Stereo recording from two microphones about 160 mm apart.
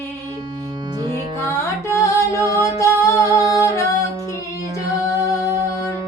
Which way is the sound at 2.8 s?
20° left (ahead or behind).